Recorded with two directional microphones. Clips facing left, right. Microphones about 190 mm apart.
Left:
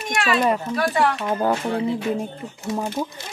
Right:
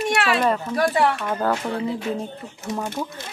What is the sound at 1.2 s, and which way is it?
Speech, 15° left (ahead or behind).